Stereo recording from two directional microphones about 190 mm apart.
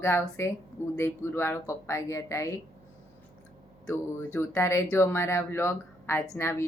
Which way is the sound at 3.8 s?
10° left (ahead or behind).